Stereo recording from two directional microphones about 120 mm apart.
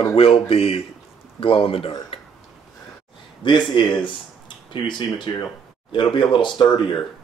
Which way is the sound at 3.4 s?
40° left (ahead or behind).